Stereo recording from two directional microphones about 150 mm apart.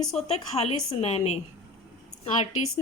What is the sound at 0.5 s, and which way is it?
Speech, 45° left (ahead or behind).